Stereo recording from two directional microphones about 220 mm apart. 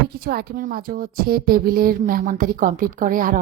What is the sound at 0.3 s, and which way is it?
Speech, 45° right (ahead or behind).